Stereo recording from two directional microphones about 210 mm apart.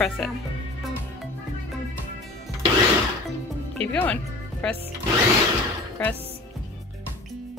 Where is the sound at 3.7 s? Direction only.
5° left (ahead or behind).